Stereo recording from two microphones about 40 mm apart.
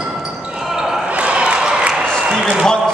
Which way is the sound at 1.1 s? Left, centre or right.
Right.